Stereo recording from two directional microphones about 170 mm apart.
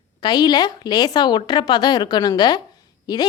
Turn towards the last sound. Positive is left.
turn(degrees=25)  # may be behind; listen again after turning